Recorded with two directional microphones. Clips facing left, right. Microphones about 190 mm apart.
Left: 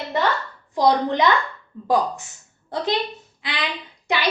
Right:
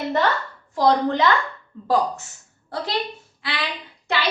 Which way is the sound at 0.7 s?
20° left (ahead or behind).